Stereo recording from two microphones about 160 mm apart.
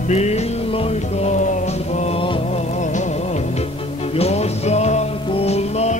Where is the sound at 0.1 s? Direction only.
40° left (ahead or behind).